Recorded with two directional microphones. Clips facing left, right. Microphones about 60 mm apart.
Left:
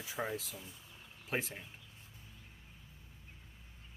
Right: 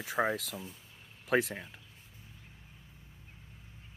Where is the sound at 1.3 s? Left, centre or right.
Right.